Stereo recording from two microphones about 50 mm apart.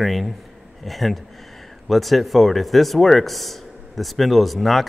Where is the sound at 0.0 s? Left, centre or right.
Centre.